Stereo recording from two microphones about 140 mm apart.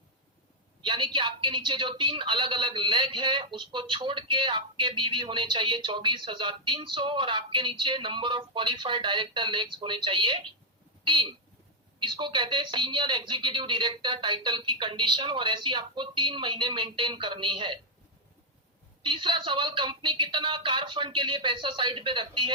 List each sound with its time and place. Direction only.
0.8 s speech: 35° right (ahead or behind)
19.0 s speech: 35° right (ahead or behind)